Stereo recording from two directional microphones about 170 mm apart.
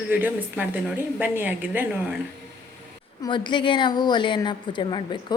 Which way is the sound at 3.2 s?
25° left (ahead or behind).